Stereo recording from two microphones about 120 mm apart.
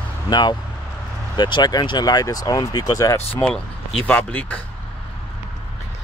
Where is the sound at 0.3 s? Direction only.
35° left (ahead or behind).